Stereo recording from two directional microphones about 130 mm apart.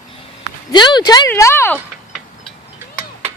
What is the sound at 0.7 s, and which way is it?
Speech, 35° left (ahead or behind).